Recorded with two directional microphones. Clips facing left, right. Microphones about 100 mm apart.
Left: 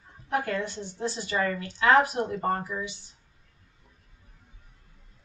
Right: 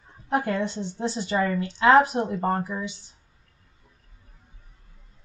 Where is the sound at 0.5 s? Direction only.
25° right (ahead or behind).